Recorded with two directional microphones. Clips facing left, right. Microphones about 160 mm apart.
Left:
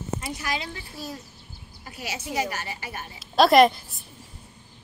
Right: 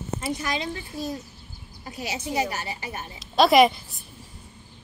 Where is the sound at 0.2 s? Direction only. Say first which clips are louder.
Right 3 dB; 25° right (ahead or behind).